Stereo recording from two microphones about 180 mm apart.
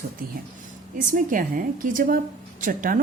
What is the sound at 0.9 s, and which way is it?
A woman's voice, 50° right (ahead or behind).